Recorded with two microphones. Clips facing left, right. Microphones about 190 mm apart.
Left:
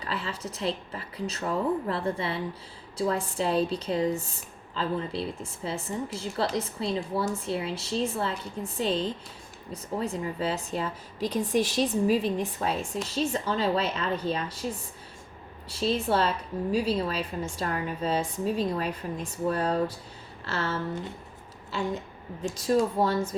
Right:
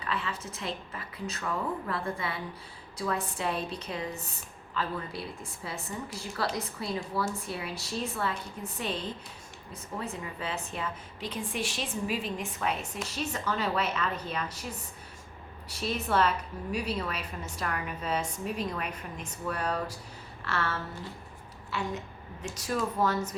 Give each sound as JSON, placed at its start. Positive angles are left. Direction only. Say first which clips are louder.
{"t": 0.0, "sound": "a woman's voice", "louder": "left 1 dB", "side_deg": 30}
{"t": 15.7, "sound": "a woman's voice", "louder": "left 4 dB", "side_deg": 30}